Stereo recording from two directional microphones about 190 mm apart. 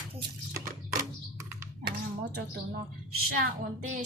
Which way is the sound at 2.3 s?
55° right (ahead or behind).